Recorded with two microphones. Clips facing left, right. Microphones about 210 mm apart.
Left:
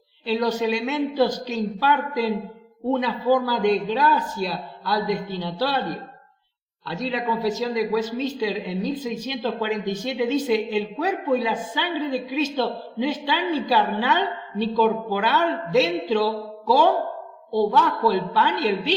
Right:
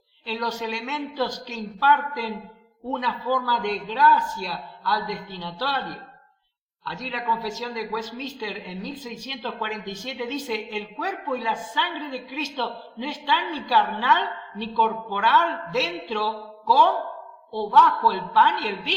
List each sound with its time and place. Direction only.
0.3 s a woman's voice: 25° left (ahead or behind)